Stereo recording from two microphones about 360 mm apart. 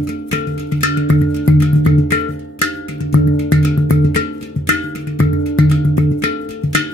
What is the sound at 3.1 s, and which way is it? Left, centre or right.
Music, left.